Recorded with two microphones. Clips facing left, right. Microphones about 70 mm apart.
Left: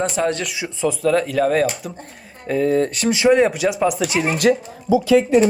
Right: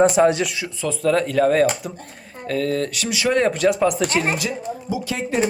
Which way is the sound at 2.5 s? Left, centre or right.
Centre.